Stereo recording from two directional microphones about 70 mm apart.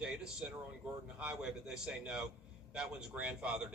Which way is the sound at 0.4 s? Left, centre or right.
Centre.